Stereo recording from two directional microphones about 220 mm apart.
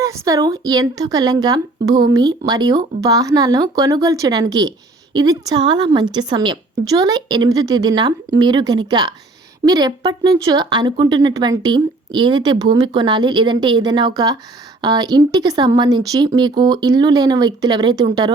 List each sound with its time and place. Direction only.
0.0 s a woman's voice: 15° right (ahead or behind)